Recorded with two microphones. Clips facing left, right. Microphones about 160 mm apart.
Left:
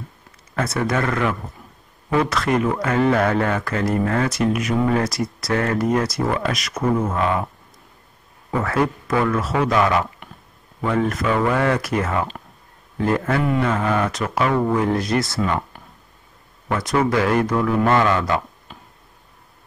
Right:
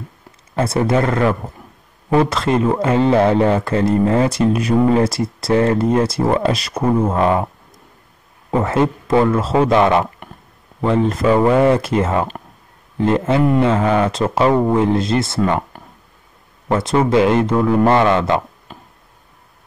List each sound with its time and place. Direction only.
0.6 s speech: 30° right (ahead or behind)
8.5 s a man's voice: 25° right (ahead or behind)
16.6 s speech: 25° right (ahead or behind)